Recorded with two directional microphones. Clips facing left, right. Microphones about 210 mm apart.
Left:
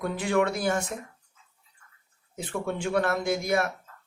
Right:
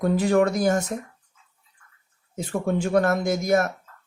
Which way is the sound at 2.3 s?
40° right (ahead or behind).